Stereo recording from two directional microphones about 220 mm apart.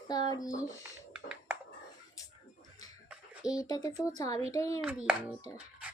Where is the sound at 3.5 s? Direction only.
15° left (ahead or behind).